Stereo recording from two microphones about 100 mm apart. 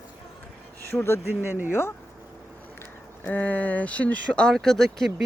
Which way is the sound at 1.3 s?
20° right (ahead or behind).